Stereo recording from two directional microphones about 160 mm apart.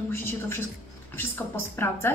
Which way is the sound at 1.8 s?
15° left (ahead or behind).